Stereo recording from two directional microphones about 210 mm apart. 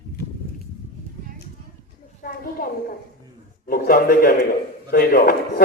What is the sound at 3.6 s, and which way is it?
A man's voice, 45° left (ahead or behind).